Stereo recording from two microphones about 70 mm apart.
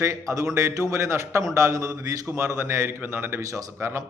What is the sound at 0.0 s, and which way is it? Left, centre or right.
A man's voice, right.